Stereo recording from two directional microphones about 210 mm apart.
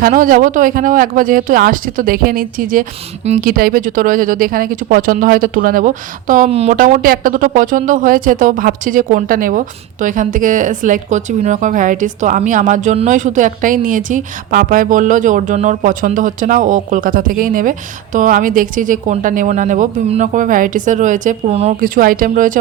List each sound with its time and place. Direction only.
0.0 s speech: 40° right (ahead or behind)